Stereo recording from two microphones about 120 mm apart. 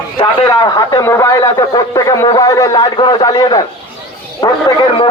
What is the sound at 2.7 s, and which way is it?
A man's voice, 45° left (ahead or behind).